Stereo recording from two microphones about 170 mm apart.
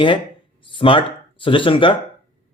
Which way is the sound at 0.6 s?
30° left (ahead or behind).